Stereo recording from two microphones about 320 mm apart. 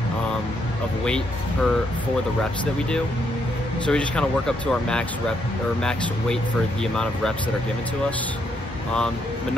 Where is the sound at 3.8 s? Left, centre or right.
Centre.